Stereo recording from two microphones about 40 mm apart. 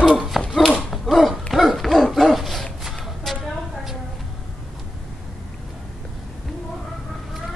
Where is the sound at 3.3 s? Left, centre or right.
Centre.